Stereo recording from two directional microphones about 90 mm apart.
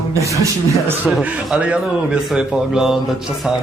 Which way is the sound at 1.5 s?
10° right (ahead or behind).